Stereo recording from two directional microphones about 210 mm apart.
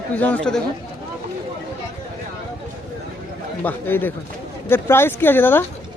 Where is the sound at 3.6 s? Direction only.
10° left (ahead or behind).